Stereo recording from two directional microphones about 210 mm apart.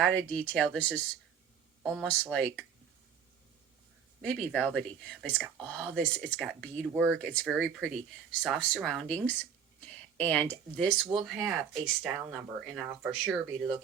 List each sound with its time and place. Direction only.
0.0 s speech: 5° left (ahead or behind)
4.2 s speech: 5° left (ahead or behind)